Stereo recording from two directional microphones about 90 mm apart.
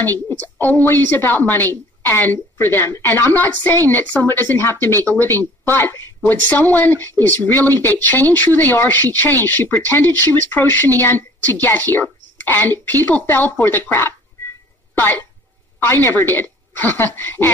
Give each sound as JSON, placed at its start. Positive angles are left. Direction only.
{"t": 0.0, "sound": "speech", "side_deg": 20}
{"t": 15.8, "sound": "speech", "side_deg": 25}